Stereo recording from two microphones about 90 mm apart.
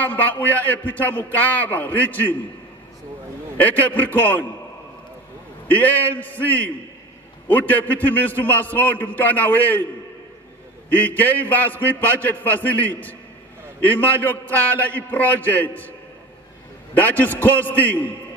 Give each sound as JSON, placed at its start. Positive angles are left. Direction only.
{"t": 0.0, "sound": "a man's voice", "side_deg": 20}
{"t": 3.5, "sound": "a man's voice", "side_deg": 20}
{"t": 5.7, "sound": "a man's voice", "side_deg": 20}
{"t": 10.9, "sound": "a man's voice", "side_deg": 20}
{"t": 16.9, "sound": "a man's voice", "side_deg": 20}